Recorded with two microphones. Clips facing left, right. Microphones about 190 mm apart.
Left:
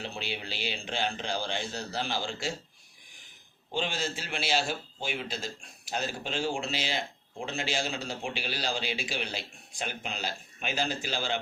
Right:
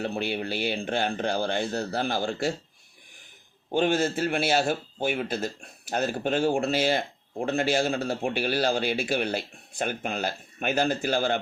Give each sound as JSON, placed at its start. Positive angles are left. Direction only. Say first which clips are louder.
{"t": 0.0, "sound": "a man's voice", "louder": "right 8 dB", "side_deg": -55}
{"t": 3.7, "sound": "a man's voice", "louder": "right 9 dB", "side_deg": -55}